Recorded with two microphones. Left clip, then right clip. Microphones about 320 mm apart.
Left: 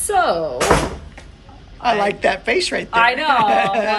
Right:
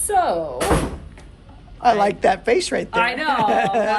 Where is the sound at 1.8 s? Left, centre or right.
Centre.